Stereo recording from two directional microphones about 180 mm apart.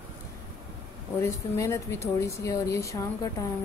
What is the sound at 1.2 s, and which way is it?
Speech, 15° left (ahead or behind).